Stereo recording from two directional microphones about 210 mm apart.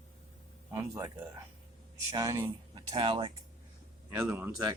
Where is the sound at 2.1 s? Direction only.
15° right (ahead or behind).